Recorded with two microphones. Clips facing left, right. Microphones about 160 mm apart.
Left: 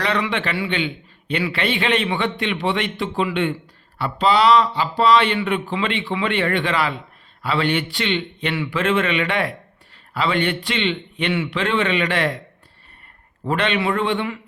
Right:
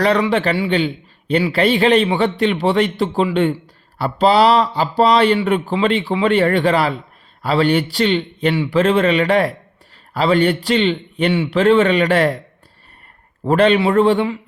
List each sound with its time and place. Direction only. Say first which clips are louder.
0.0 s a man's voice: right 7 dB; 40° right (ahead or behind)
13.4 s a man's voice: right 8 dB; 40° right (ahead or behind)